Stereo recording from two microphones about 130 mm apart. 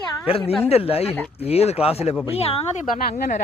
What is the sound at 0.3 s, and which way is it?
Speech, 45° left (ahead or behind).